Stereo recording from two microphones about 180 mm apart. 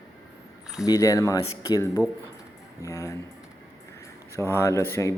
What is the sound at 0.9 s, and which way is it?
A man's voice, 20° left (ahead or behind).